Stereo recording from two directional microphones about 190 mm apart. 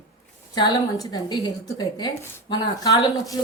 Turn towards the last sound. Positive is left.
turn(degrees=15)  # may be behind; listen again after turning